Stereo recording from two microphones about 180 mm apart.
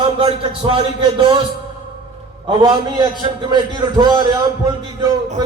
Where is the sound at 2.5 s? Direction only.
25° right (ahead or behind).